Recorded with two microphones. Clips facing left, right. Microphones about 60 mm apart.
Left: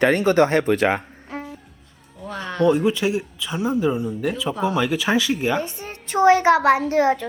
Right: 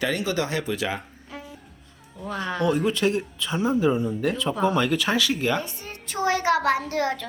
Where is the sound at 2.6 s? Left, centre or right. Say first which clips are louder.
Left 4 dB; centre.